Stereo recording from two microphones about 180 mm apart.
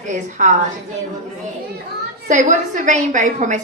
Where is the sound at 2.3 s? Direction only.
45° right (ahead or behind).